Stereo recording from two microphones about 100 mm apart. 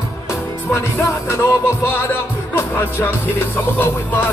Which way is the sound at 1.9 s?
25° left (ahead or behind).